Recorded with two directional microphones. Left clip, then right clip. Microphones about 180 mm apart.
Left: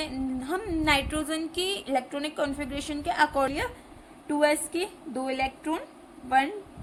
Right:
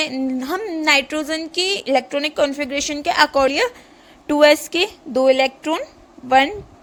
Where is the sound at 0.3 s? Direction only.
50° right (ahead or behind).